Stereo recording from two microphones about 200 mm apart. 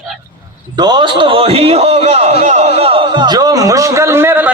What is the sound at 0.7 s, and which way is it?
A man's voice, 20° right (ahead or behind).